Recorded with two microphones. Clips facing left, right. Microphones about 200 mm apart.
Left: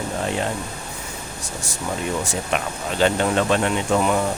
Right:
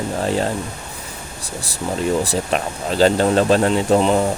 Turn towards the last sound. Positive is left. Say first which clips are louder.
# right 5 dB
turn(degrees=-30)  # may be behind; listen again after turning